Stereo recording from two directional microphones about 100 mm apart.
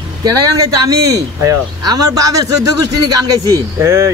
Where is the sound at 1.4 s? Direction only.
35° right (ahead or behind).